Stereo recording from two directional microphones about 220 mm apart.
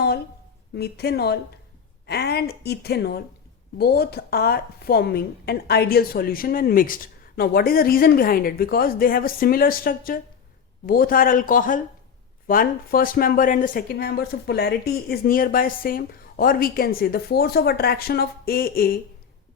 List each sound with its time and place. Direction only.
0.8 s speech: 45° left (ahead or behind)